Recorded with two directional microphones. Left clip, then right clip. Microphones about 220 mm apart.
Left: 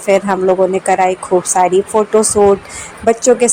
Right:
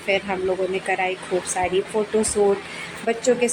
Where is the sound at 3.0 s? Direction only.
25° left (ahead or behind).